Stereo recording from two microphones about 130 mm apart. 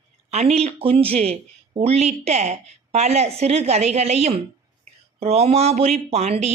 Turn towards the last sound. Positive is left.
turn(degrees=-55)  # may be behind; listen again after turning